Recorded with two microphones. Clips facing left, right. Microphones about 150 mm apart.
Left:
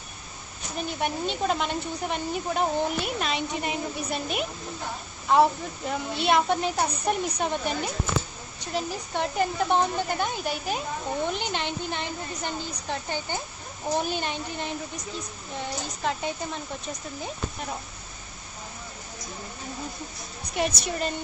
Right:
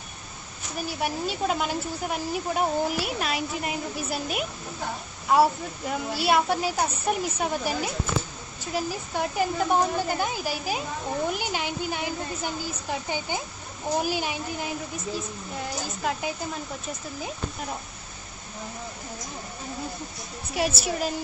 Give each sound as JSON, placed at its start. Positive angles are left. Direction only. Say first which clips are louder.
{"t": 0.7, "sound": "a woman's voice", "louder": "even", "side_deg": -5}
{"t": 20.5, "sound": "speech", "louder": "right 1 dB", "side_deg": -5}